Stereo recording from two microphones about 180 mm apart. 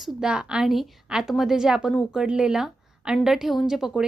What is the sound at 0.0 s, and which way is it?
A woman's voice, centre (ahead or behind).